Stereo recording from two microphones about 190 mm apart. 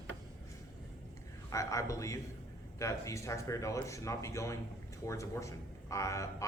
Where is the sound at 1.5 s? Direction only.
15° left (ahead or behind).